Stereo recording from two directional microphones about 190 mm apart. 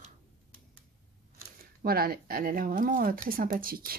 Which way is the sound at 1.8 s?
50° right (ahead or behind).